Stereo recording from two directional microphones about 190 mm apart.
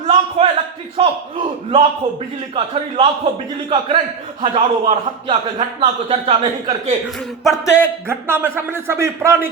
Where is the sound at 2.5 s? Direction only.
30° right (ahead or behind).